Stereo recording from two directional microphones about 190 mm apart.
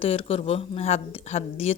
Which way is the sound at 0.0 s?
30° left (ahead or behind).